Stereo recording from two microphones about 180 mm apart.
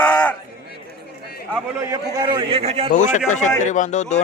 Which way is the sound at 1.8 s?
20° right (ahead or behind).